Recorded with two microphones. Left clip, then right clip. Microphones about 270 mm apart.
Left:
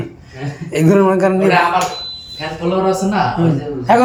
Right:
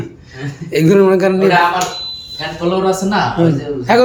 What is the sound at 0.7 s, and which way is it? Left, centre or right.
Speech, centre.